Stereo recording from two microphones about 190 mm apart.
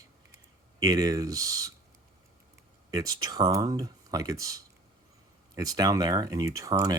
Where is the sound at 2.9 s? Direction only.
20° right (ahead or behind).